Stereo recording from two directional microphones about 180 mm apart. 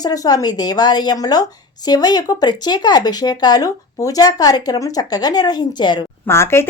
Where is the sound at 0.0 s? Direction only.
20° left (ahead or behind).